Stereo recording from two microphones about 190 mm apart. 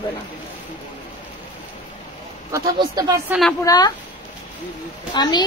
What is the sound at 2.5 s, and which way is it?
Speech, 20° right (ahead or behind).